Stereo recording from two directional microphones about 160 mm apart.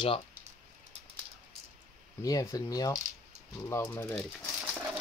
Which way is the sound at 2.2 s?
20° left (ahead or behind).